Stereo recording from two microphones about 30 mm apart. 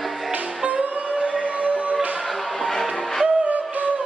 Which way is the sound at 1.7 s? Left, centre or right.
Right.